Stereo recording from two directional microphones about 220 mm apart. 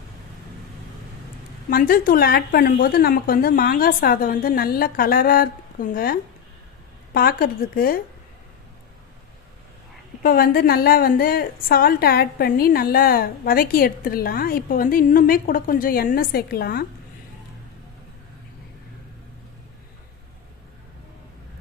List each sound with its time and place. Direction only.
1.7 s a woman's voice: 40° left (ahead or behind)
10.2 s a woman's voice: 40° left (ahead or behind)